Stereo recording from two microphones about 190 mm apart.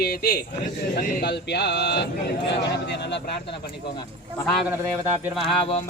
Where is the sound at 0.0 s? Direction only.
55° left (ahead or behind).